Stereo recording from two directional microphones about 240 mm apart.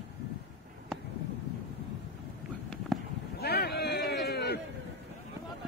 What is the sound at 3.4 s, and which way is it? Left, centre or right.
Boat, left.